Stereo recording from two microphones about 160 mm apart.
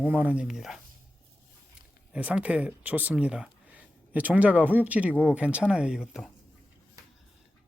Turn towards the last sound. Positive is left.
turn(degrees=-5)  # may be behind; listen again after turning